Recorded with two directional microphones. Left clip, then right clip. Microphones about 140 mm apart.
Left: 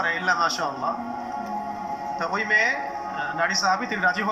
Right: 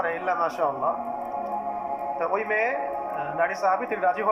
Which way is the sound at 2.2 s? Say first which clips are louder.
Left 4 dB; 45° right (ahead or behind).